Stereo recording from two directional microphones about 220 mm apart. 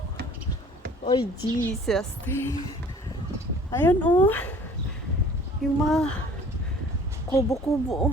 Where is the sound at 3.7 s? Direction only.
10° left (ahead or behind).